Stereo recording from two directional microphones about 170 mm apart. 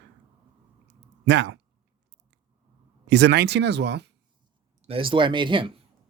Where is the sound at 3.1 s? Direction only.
85° right.